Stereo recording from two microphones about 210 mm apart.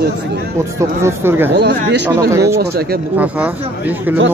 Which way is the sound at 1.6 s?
55° right (ahead or behind).